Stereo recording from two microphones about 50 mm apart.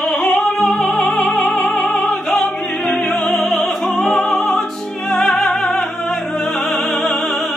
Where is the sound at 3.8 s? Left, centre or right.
Centre.